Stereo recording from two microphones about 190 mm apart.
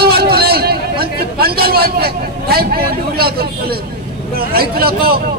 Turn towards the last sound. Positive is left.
turn(degrees=-55)  # may be behind; listen again after turning